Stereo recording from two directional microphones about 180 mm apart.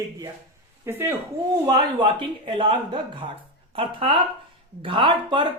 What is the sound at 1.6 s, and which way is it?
Speech, 25° right (ahead or behind).